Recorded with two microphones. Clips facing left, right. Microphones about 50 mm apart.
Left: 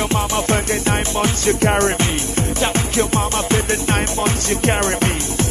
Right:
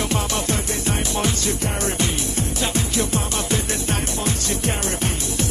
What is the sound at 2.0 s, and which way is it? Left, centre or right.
Music, left.